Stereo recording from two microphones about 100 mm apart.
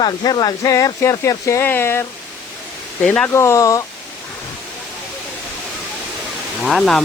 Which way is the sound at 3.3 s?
30° left (ahead or behind).